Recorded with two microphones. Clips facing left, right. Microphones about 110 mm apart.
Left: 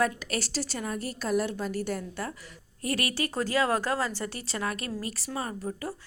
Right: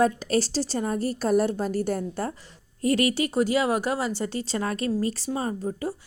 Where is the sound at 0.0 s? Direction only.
30° right (ahead or behind).